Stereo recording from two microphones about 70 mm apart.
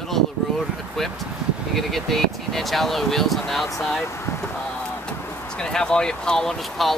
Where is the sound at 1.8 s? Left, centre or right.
Centre.